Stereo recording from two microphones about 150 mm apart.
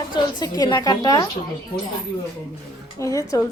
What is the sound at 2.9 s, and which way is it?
Speech, 20° left (ahead or behind).